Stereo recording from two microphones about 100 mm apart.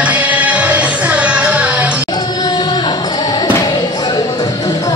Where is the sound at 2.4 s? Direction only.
45° left (ahead or behind).